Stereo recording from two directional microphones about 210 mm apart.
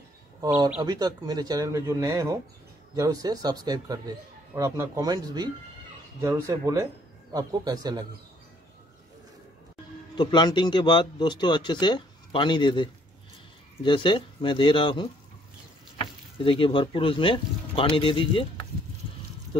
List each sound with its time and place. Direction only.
0.8 s speech: 20° right (ahead or behind)
10.1 s speech: 20° left (ahead or behind)